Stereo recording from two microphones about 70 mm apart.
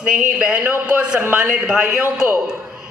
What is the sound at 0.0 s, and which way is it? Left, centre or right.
A woman's voice, centre.